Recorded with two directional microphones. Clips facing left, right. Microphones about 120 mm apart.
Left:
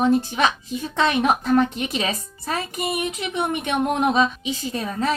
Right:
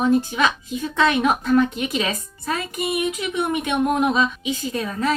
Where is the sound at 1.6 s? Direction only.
35° left (ahead or behind).